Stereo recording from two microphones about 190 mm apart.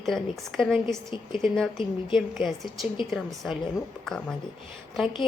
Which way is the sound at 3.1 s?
Centre (ahead or behind).